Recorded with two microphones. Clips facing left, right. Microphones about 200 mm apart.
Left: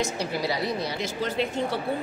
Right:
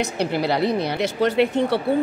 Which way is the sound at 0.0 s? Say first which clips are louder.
Right 5 dB; 60° right (ahead or behind).